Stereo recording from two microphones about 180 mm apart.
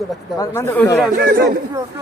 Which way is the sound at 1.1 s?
65° right (ahead or behind).